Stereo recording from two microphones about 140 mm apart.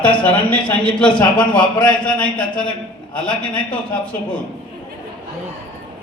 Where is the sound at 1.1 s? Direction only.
35° left (ahead or behind).